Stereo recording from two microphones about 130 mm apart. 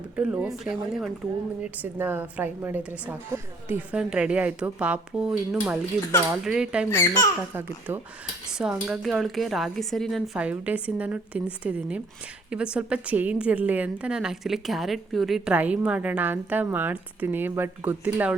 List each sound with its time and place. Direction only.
0.2 s a woman's voice: 10° right (ahead or behind)
1.8 s a woman's voice: 15° right (ahead or behind)
6.9 s speech: 20° left (ahead or behind)
7.5 s a woman's voice: 15° right (ahead or behind)
8.5 s a woman's voice: 5° right (ahead or behind)
10.3 s a woman's voice: 10° right (ahead or behind)
15.5 s a woman's voice: 10° right (ahead or behind)